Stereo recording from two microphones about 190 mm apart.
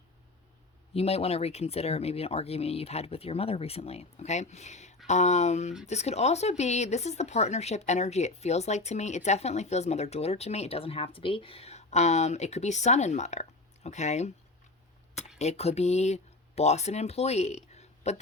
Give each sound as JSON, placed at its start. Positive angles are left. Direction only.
{"t": 0.9, "sound": "speech", "side_deg": 30}
{"t": 15.4, "sound": "speech", "side_deg": 35}